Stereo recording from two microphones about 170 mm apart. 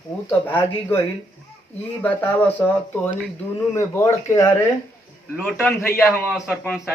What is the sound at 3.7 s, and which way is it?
Speech, 15° left (ahead or behind).